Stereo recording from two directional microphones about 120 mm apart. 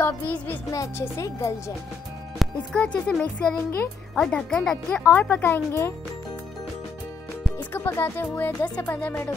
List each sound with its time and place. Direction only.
0.0 s a child's voice: 15° left (ahead or behind)
0.7 s speech: 25° left (ahead or behind)
2.3 s a child's voice: 5° left (ahead or behind)
4.1 s a child's voice: 5° left (ahead or behind); by 5.9 s 20° left (ahead or behind)
7.5 s speech: 20° left (ahead or behind)